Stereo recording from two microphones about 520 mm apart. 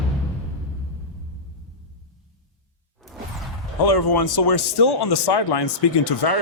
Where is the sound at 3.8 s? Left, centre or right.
Left.